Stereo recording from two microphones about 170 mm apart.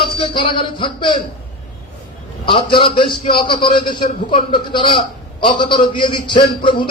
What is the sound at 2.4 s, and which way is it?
A man's voice, 30° left (ahead or behind).